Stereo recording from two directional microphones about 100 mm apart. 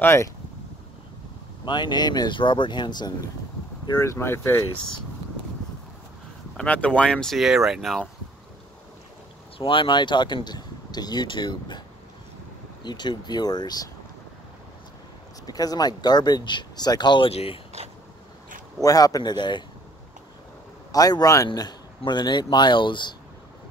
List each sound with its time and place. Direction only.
0.0 s speech: 25° left (ahead or behind)
1.7 s speech: 50° left (ahead or behind)
4.0 s speech: 25° left (ahead or behind)
6.5 s speech: 10° left (ahead or behind)
9.6 s speech: 60° left (ahead or behind)
12.8 s speech: 45° left (ahead or behind)
15.4 s speech: 40° left (ahead or behind)
17.3 s speech: 80° left
18.8 s speech: 35° left (ahead or behind)
20.9 s speech: 40° left (ahead or behind)